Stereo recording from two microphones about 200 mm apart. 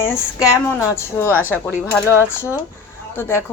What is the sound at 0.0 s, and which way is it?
A woman's voice, 10° left (ahead or behind).